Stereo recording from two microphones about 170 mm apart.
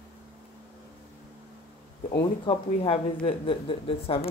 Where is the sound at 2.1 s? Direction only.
30° left (ahead or behind).